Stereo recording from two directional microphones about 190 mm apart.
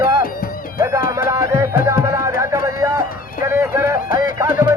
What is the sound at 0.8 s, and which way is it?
Music, 15° right (ahead or behind).